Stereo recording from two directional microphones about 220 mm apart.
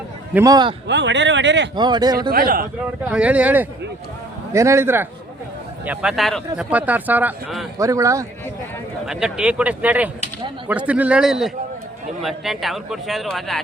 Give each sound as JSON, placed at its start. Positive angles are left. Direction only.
{"t": 0.3, "sound": "speech", "side_deg": -15}
{"t": 0.9, "sound": "speech", "side_deg": -55}
{"t": 1.7, "sound": "speech", "side_deg": -20}
{"t": 2.3, "sound": "speech", "side_deg": -40}
{"t": 3.0, "sound": "speech", "side_deg": -5}
{"t": 9.0, "sound": "a man's voice", "side_deg": -5}